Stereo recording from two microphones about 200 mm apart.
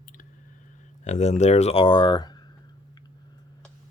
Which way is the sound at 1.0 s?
35° left (ahead or behind).